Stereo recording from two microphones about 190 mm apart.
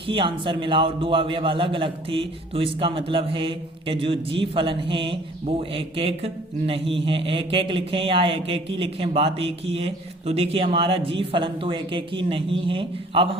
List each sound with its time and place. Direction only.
0.1 s a man's voice: 25° right (ahead or behind)